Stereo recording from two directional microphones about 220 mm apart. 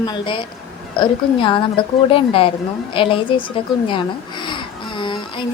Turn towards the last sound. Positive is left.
turn(degrees=20)  # may be behind; listen again after turning